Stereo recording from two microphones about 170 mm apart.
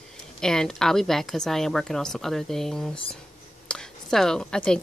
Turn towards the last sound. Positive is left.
turn(degrees=5)  # may be behind; listen again after turning